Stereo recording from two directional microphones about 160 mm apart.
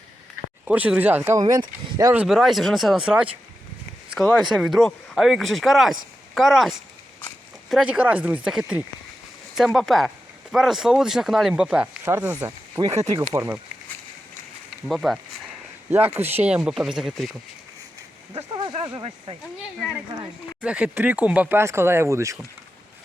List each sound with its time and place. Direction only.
0.7 s speech: 10° right (ahead or behind)
1.4 s speech: 25° right (ahead or behind)
2.1 s speech: centre (ahead or behind)
14.8 s speech: centre (ahead or behind)
15.9 s speech: 10° right (ahead or behind)
18.5 s a sound: 30° right (ahead or behind)
20.6 s speech: 10° right (ahead or behind)